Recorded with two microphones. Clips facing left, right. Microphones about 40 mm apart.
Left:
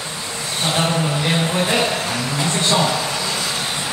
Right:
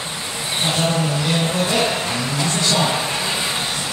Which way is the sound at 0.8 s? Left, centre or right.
Left.